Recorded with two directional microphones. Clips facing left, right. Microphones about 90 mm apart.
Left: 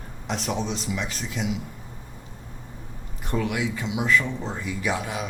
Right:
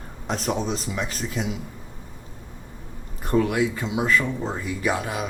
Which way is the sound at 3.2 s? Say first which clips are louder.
Right 5 dB; 40° right (ahead or behind).